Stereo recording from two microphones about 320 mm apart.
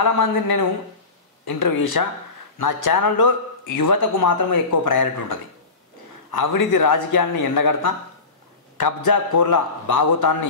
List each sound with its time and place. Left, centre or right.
0.0 s speech: left